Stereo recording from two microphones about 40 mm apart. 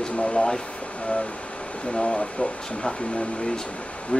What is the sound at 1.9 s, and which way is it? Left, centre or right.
Speech, left.